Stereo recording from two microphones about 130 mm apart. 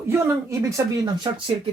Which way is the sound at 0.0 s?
20° right (ahead or behind).